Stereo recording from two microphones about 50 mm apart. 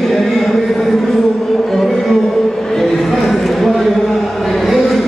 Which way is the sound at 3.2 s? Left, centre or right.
Centre.